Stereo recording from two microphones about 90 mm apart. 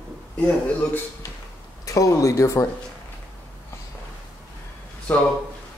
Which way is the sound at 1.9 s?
35° left (ahead or behind).